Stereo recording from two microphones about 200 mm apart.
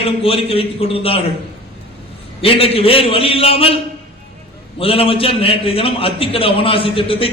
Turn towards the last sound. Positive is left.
turn(degrees=25)  # may be behind; listen again after turning